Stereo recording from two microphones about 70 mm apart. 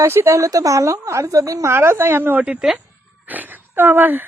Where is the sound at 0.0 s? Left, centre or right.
Right.